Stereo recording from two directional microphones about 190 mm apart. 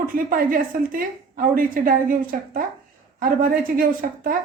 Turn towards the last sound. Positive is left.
turn(degrees=-50)  # may be behind; listen again after turning